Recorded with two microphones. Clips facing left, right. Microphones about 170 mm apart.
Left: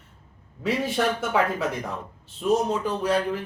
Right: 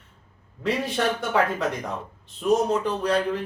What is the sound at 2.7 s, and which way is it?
Speech, 5° left (ahead or behind).